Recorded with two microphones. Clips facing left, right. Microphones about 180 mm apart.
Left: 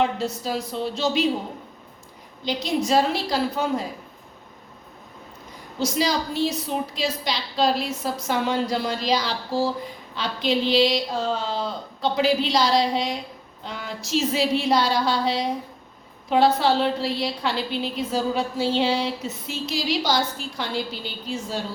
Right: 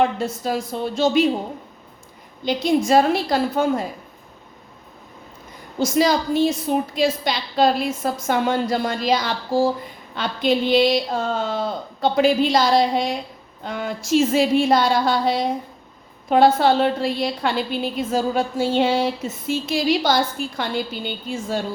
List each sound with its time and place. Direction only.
0.2 s a woman's voice: 50° right (ahead or behind)
2.4 s a woman's voice: 50° right (ahead or behind)
5.8 s a woman's voice: 50° right (ahead or behind)